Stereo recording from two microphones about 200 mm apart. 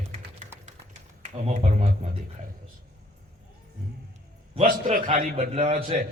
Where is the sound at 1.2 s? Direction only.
35° right (ahead or behind).